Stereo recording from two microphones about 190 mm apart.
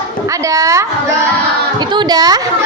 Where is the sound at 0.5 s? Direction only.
20° right (ahead or behind).